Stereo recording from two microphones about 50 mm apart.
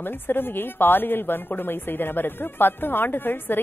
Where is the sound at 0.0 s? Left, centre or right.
Left.